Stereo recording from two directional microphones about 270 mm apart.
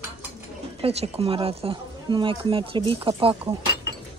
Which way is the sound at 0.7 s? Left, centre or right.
Right.